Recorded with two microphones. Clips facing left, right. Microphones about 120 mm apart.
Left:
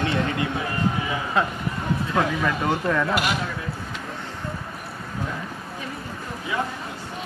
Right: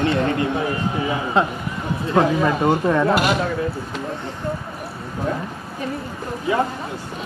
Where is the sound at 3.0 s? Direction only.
40° right (ahead or behind).